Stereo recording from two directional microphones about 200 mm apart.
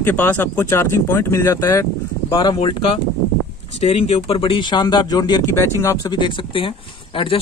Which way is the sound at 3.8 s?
30° left (ahead or behind).